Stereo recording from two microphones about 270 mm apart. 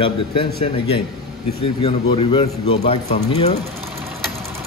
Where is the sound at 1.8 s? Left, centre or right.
Centre.